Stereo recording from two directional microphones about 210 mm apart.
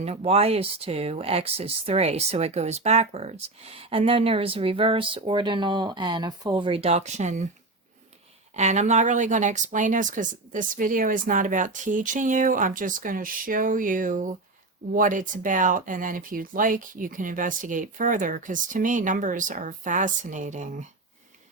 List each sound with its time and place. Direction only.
0.0 s speech: 30° right (ahead or behind)
8.5 s speech: 35° right (ahead or behind)